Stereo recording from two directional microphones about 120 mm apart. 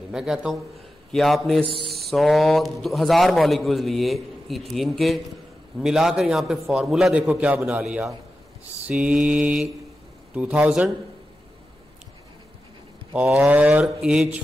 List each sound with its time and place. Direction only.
0.1 s a man's voice: 5° right (ahead or behind)
1.6 s speech: 50° right (ahead or behind)
1.9 s a man's voice: centre (ahead or behind)
8.8 s mantra: 10° right (ahead or behind)
13.1 s mantra: 15° right (ahead or behind)